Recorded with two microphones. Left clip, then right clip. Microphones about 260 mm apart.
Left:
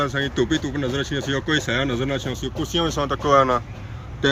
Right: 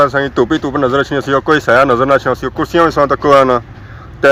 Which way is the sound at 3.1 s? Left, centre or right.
Right.